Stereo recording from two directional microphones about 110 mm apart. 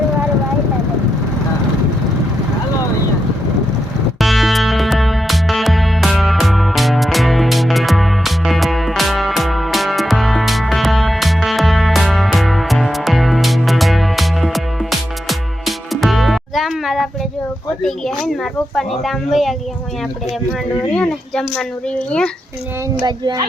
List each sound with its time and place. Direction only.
4.2 s music: centre (ahead or behind)
17.8 s a child's voice: centre (ahead or behind)
20.9 s speech: 10° left (ahead or behind)
23.0 s speech: 40° right (ahead or behind)